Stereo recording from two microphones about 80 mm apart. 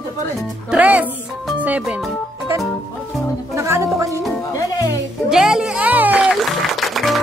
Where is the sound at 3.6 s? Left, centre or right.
Right.